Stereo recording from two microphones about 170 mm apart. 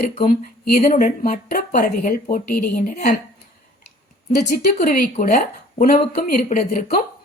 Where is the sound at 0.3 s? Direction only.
55° left (ahead or behind).